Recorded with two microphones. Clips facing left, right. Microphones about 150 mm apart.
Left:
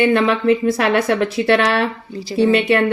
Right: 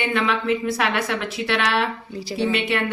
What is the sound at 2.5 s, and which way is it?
Speech, 45° left (ahead or behind).